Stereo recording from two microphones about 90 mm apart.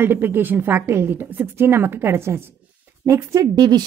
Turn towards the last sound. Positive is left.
turn(degrees=-50)  # may be behind; listen again after turning